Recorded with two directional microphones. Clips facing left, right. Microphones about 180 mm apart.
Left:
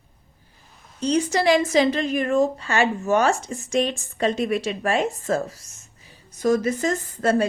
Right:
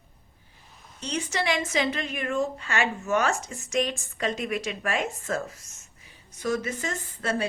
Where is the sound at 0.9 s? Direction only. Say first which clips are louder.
Left 9 dB; 35° left (ahead or behind).